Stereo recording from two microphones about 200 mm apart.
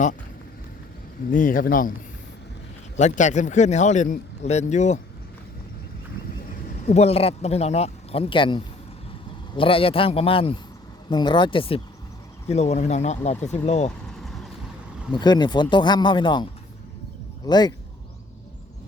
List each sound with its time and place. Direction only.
1.3 s speech: 40° left (ahead or behind)
2.9 s speech: 35° left (ahead or behind)
6.8 s speech: 30° left (ahead or behind)
15.1 s speech: 20° left (ahead or behind)